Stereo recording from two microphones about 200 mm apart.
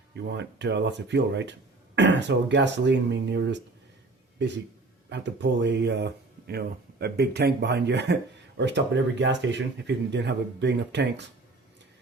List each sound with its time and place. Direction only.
0.3 s speech: 60° right (ahead or behind)
5.0 s speech: 60° right (ahead or behind)